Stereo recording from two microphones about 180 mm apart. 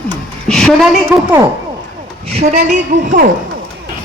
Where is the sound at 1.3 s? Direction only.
20° right (ahead or behind).